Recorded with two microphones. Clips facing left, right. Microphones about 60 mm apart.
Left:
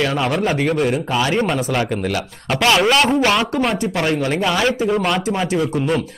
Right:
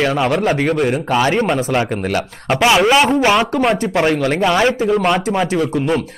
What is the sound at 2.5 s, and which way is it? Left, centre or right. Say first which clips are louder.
Speech: right 3 dB; centre.